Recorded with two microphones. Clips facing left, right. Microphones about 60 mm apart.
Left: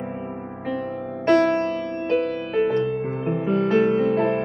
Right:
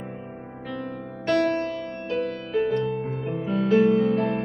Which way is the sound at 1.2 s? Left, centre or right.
Left.